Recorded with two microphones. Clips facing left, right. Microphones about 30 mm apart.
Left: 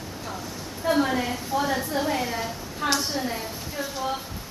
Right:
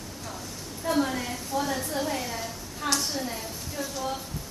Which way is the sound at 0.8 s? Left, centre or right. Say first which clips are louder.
Left 4 dB; centre.